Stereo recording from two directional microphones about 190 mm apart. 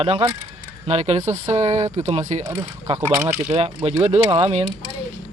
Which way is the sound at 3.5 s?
30° right (ahead or behind).